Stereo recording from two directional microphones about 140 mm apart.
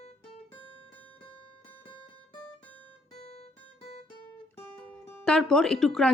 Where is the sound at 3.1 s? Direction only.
50° left (ahead or behind).